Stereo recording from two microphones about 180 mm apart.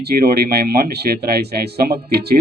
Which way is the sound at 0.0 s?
60° right (ahead or behind).